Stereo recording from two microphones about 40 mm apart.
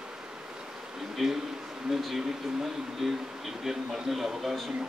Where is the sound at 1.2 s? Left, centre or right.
Centre.